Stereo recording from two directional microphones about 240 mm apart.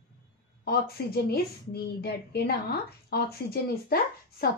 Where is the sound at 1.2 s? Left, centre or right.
Left.